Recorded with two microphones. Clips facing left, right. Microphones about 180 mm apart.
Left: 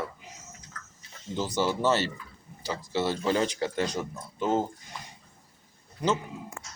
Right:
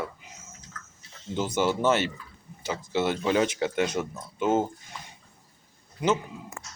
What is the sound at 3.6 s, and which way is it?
Speech, 20° right (ahead or behind).